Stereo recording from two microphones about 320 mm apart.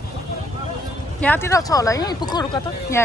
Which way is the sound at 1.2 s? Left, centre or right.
Centre.